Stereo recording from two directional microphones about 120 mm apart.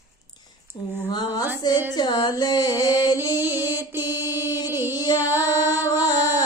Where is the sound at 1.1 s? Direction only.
35° left (ahead or behind).